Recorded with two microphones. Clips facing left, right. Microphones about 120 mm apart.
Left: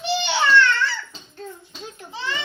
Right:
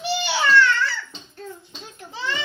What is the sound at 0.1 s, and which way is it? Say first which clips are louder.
Baby cry: left 1 dB; 5° right (ahead or behind).